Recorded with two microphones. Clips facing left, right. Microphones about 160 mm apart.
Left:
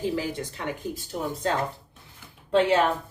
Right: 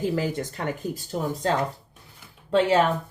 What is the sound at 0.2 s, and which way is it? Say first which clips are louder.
Cough: right 3 dB; 50° right (ahead or behind).